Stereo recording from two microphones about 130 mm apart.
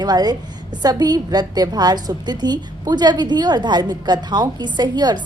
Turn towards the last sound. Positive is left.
turn(degrees=-35)  # may be behind; listen again after turning